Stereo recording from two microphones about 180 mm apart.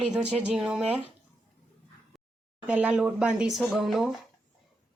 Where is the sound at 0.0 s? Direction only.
5° right (ahead or behind).